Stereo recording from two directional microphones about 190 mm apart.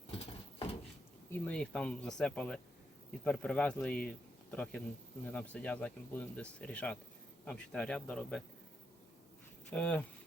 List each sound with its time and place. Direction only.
0.1 s a sound: 30° left (ahead or behind)
1.3 s speech: 5° left (ahead or behind)
9.6 s speech: 5° left (ahead or behind)